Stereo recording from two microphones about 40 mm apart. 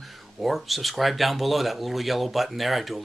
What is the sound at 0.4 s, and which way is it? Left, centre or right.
Speech, centre.